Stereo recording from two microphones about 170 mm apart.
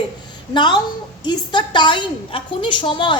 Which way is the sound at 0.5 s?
25° left (ahead or behind).